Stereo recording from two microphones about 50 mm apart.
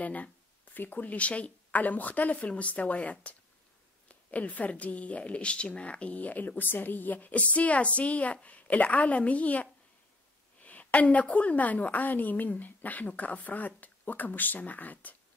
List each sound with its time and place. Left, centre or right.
0.0 s a woman's voice: left